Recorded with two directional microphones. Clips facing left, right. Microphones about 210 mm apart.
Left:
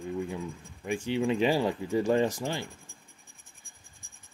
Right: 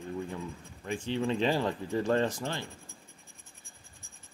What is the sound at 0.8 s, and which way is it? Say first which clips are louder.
Speech: left 3 dB; 10° left (ahead or behind).